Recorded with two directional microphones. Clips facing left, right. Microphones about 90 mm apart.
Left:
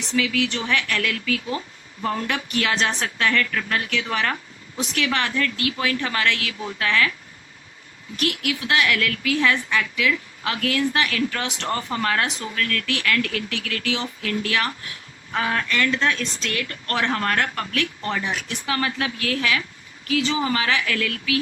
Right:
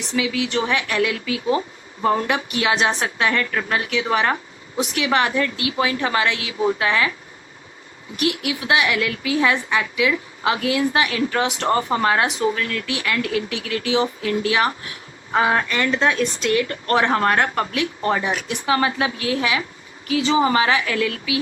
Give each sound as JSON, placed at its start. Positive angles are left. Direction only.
{"t": 0.2, "sound": "speech", "side_deg": -15}
{"t": 8.2, "sound": "speech", "side_deg": -20}